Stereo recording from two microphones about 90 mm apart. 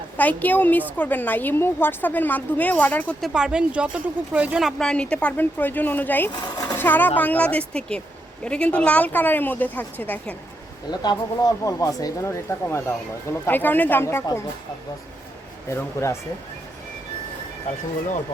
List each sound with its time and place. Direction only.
0.2 s a woman's voice: 20° left (ahead or behind)
3.2 s speech: 5° right (ahead or behind)
4.8 s a woman's voice: 10° left (ahead or behind)
6.3 s sewing machine: 50° left (ahead or behind)
6.7 s a woman's voice: 20° left (ahead or behind)
10.9 s a woman's voice: 50° left (ahead or behind); by 14.3 s 25° left (ahead or behind)
15.7 s speech: 30° left (ahead or behind)